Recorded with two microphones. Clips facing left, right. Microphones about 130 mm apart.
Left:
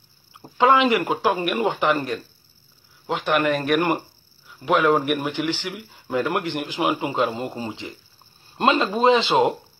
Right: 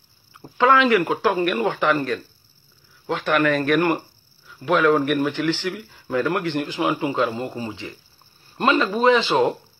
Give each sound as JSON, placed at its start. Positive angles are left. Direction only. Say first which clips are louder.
{"t": 0.3, "sound": "speech", "louder": "even", "side_deg": 20}